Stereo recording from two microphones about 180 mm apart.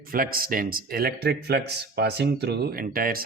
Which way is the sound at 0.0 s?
55° right (ahead or behind).